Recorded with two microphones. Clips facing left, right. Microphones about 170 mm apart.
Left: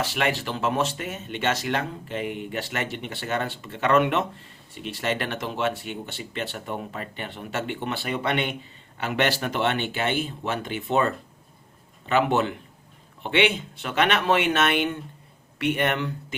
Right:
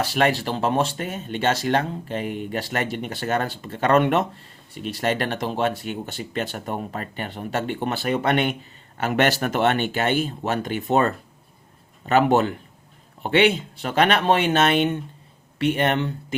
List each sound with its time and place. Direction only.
0.0 s speech: 40° right (ahead or behind)